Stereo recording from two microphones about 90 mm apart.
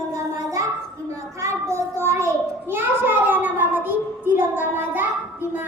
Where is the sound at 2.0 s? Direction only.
30° right (ahead or behind).